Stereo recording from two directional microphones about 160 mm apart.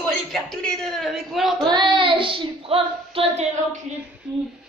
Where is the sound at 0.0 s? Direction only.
Centre (ahead or behind).